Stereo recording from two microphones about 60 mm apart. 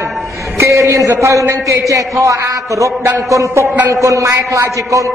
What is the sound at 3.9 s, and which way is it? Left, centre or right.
A man's voice, right.